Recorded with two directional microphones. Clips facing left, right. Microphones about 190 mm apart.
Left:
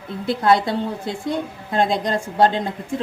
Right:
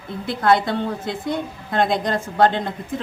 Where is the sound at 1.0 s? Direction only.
35° left (ahead or behind).